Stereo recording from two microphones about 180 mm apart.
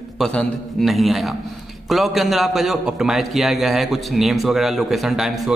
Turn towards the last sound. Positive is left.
turn(degrees=0)  # may be behind; listen again after turning